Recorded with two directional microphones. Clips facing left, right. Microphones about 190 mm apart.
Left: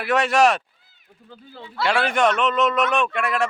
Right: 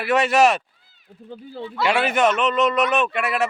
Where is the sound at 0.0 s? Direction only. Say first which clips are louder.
Right 1 dB; centre (ahead or behind).